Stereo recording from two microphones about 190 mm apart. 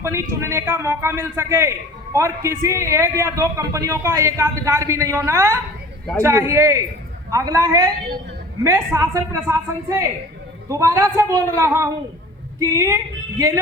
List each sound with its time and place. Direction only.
0.0 s a man's voice: 15° right (ahead or behind)